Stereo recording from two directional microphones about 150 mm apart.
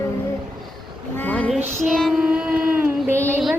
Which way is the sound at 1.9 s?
Centre (ahead or behind).